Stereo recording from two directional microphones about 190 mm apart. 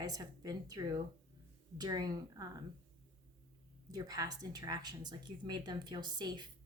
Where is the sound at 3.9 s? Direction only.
20° right (ahead or behind).